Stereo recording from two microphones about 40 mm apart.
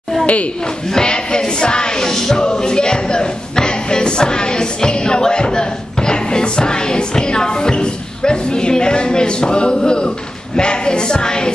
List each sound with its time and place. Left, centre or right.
0.8 s music: centre